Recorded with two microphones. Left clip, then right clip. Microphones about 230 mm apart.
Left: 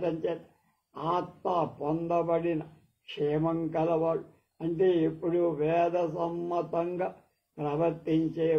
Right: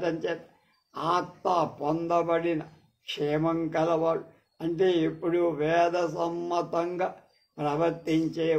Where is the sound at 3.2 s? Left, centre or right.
Right.